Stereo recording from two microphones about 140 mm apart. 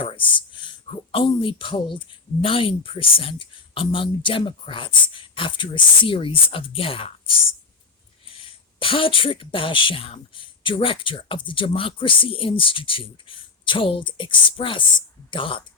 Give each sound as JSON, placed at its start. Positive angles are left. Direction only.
{"t": 0.0, "sound": "a sound", "side_deg": 40}
{"t": 1.1, "sound": "speech", "side_deg": 35}
{"t": 8.8, "sound": "speech", "side_deg": 40}